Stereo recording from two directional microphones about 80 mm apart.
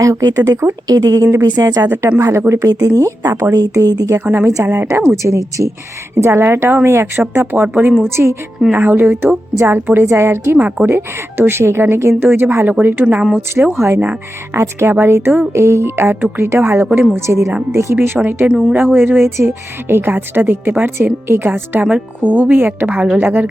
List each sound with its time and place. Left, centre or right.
0.0 s speech: right
1.5 s speech: right
1.9 s speech: right
2.1 s speech: right
4.2 s speech: right
8.1 s speech: right
10.6 s speech: centre
10.9 s speech: right
13.7 s speech: right
18.4 s a woman's voice: centre